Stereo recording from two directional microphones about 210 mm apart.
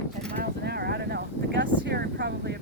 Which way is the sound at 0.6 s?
50° right (ahead or behind).